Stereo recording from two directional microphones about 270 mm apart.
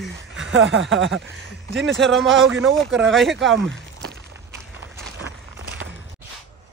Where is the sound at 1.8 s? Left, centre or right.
Centre.